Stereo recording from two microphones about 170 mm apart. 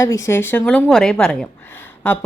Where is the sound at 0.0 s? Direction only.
15° left (ahead or behind).